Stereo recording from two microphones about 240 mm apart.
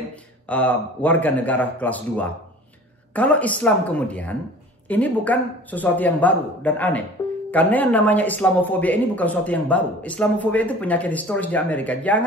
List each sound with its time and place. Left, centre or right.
0.5 s speech: centre